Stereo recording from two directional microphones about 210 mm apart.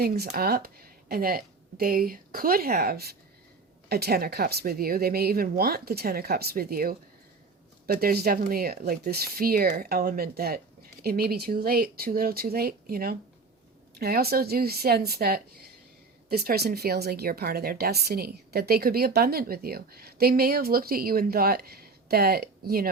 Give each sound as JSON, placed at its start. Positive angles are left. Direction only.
{"t": 0.1, "sound": "a woman's voice", "side_deg": -45}